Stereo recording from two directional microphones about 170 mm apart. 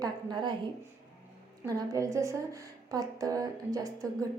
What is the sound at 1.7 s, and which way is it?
A woman's voice, 20° right (ahead or behind).